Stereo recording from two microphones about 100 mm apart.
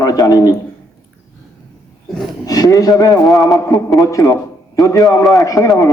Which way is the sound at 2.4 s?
40° left (ahead or behind).